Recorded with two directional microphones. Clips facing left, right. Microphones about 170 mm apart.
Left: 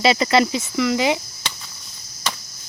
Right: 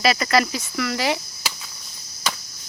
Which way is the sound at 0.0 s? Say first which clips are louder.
Left 3 dB; 25° left (ahead or behind).